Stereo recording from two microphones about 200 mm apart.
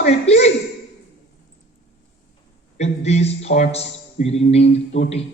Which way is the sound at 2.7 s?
35° left (ahead or behind).